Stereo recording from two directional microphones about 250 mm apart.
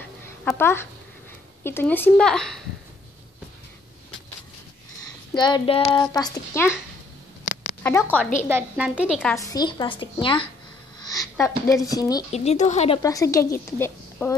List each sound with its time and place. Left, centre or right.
0.5 s a child's voice: centre
5.3 s a child's voice: centre
7.8 s a child's voice: centre
8.5 s a woman's voice: centre
9.2 s a child's voice: centre
12.3 s speech: left
13.0 s a child's voice: centre